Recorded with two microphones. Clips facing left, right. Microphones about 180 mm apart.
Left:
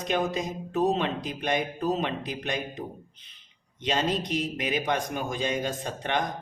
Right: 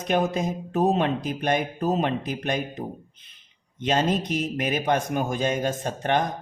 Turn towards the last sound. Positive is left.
turn(degrees=-45)  # may be behind; listen again after turning